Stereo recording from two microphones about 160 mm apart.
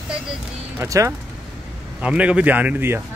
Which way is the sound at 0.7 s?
20° right (ahead or behind).